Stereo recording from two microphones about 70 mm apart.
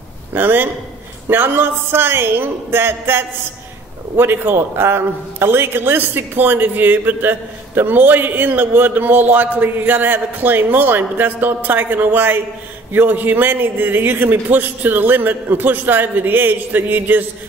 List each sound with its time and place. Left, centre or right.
0.3 s a man's voice: right